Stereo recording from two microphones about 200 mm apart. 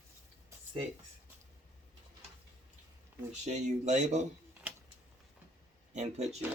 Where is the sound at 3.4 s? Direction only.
35° right (ahead or behind).